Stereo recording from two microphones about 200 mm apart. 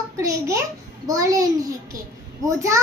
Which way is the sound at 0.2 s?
15° right (ahead or behind).